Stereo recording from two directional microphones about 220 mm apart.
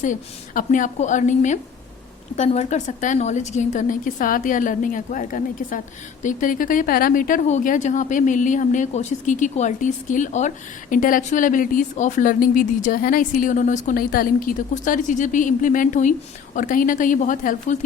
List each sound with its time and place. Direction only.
0.0 s speech: 35° left (ahead or behind)